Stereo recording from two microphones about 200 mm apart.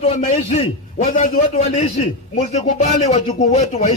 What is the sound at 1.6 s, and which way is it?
A man's voice, 30° left (ahead or behind).